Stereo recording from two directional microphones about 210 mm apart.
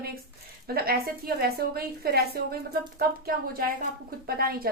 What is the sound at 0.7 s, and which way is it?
A woman's voice, 45° right (ahead or behind).